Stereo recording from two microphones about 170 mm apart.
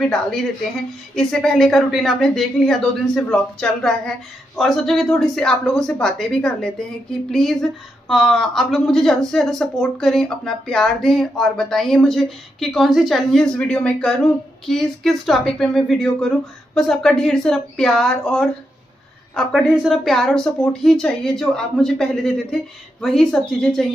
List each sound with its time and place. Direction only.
0.0 s speech: 5° left (ahead or behind)
19.7 s speech: centre (ahead or behind)